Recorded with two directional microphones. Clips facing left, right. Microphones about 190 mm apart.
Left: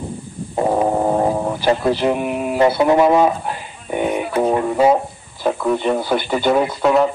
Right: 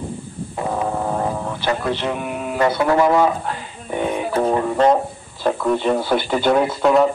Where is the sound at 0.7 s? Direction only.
30° left (ahead or behind).